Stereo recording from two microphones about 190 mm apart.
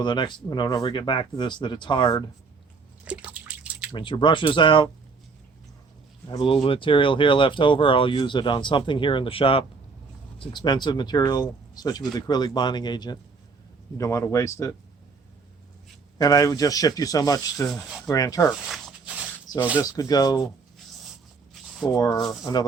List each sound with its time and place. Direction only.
0.0 s speech: 25° left (ahead or behind)
3.0 s drip: 5° right (ahead or behind)
3.9 s speech: 25° left (ahead or behind)
6.2 s speech: 25° left (ahead or behind)
16.1 s speech: 20° left (ahead or behind)
18.6 s walk: 5° right (ahead or behind)
19.5 s a sound: 20° left (ahead or behind)
19.8 s speech: 20° left (ahead or behind)
21.8 s speech: 20° left (ahead or behind)